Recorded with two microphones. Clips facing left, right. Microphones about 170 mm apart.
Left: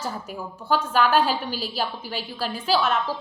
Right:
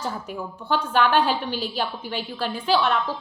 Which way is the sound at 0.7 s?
40° left (ahead or behind).